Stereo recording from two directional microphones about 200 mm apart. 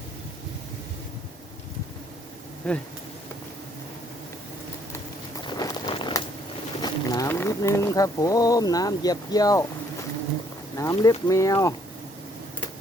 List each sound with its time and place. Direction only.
2.6 s bee: 5° left (ahead or behind)
5.4 s walk: 20° left (ahead or behind)
6.8 s speech: 20° left (ahead or behind)
10.8 s speech: 15° left (ahead or behind)